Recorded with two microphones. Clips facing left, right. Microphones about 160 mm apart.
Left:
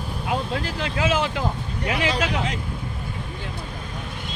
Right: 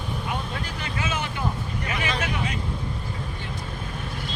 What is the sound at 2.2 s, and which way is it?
Vehicle, 75° left (ahead or behind).